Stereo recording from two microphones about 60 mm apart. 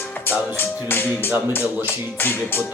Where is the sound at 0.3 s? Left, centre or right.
Left.